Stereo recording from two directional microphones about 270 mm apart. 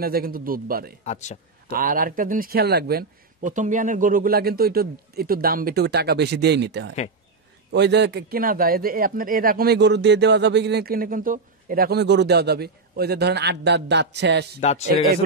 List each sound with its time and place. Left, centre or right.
0.0 s a man's voice: right
1.0 s a man's voice: left
1.7 s a man's voice: right
14.6 s a man's voice: left